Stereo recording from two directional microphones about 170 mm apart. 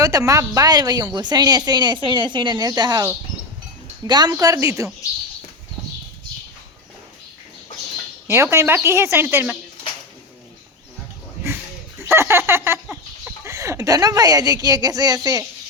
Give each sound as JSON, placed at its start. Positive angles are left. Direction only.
{"t": 0.0, "sound": "a woman's voice", "side_deg": -20}
{"t": 8.3, "sound": "a woman's voice", "side_deg": -15}
{"t": 11.9, "sound": "a sound", "side_deg": -15}
{"t": 13.4, "sound": "a woman's voice", "side_deg": -15}